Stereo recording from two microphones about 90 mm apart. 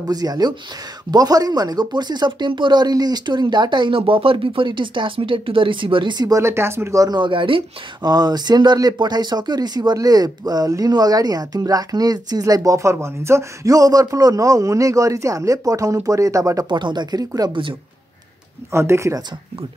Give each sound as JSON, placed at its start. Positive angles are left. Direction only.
{"t": 0.1, "sound": "speech", "side_deg": -45}
{"t": 6.4, "sound": "speech", "side_deg": -30}
{"t": 7.1, "sound": "speech", "side_deg": -65}
{"t": 8.0, "sound": "speech", "side_deg": -50}
{"t": 16.6, "sound": "speech", "side_deg": -60}
{"t": 17.5, "sound": "speech", "side_deg": -65}
{"t": 18.7, "sound": "speech", "side_deg": -30}